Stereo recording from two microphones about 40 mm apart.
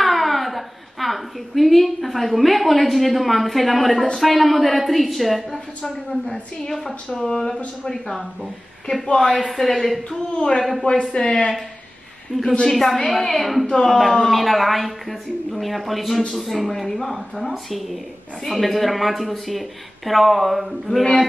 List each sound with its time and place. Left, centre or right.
0.0 s a woman's voice: centre
6.6 s a woman's voice: centre
9.0 s speech: left
9.5 s a woman's voice: centre
10.3 s speech: left
10.6 s a woman's voice: centre
11.1 s speech: left
12.6 s a woman's voice: centre
14.3 s a woman's voice: centre